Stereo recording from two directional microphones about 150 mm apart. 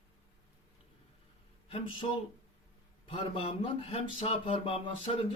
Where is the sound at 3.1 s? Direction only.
40° left (ahead or behind).